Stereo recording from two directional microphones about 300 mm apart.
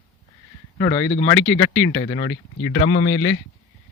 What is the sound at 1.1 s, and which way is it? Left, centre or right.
Speech, left.